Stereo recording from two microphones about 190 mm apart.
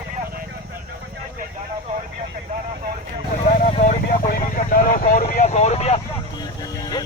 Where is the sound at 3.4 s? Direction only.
45° left (ahead or behind).